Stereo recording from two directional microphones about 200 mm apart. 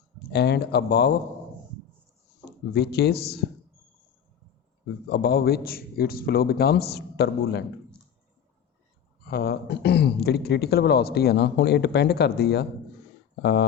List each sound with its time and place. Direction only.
0.3 s a man's voice: 55° left (ahead or behind)
2.4 s speech: 55° left (ahead or behind)
5.0 s speech: 55° left (ahead or behind)
9.3 s a man's voice: 50° left (ahead or behind)